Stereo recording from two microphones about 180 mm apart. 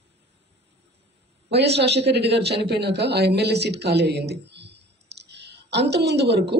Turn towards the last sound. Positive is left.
turn(degrees=-65)  # may be behind; listen again after turning